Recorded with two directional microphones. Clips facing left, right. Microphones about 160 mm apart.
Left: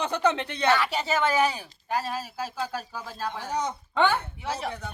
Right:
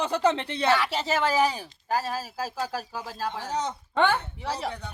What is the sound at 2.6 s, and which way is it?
Speech, 5° right (ahead or behind).